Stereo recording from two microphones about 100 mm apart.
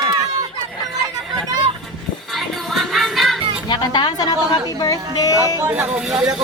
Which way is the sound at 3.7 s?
45° left (ahead or behind).